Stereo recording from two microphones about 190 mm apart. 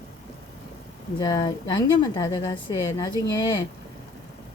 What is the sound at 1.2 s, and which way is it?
A woman's voice, 25° left (ahead or behind).